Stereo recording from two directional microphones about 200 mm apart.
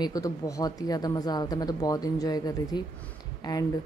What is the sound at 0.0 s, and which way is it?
Speech, 15° left (ahead or behind).